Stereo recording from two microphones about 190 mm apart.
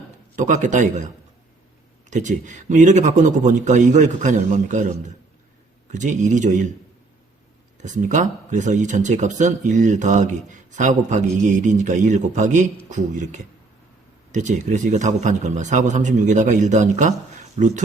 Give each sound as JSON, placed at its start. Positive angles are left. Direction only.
{"t": 0.3, "sound": "speech", "side_deg": -40}
{"t": 7.8, "sound": "speech", "side_deg": -40}